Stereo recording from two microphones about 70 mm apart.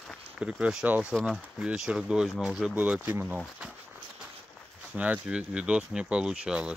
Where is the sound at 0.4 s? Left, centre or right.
Centre.